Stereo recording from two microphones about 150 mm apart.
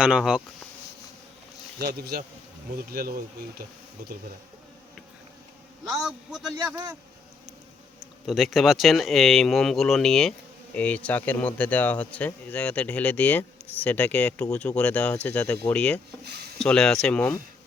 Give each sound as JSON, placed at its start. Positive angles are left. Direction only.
{"t": 0.0, "sound": "speech", "side_deg": -5}
{"t": 1.8, "sound": "bee", "side_deg": -90}
{"t": 2.7, "sound": "speech", "side_deg": -85}
{"t": 5.8, "sound": "speech", "side_deg": -5}
{"t": 8.3, "sound": "speech", "side_deg": 0}
{"t": 16.2, "sound": "a sound", "side_deg": -90}
{"t": 16.6, "sound": "speech", "side_deg": 5}